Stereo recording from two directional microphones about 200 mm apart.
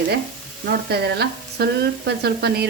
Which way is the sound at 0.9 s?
55° right (ahead or behind).